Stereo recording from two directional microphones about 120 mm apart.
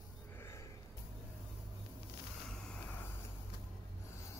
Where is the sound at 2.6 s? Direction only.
10° left (ahead or behind).